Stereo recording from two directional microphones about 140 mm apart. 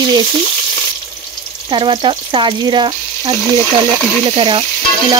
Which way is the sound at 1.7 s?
35° right (ahead or behind).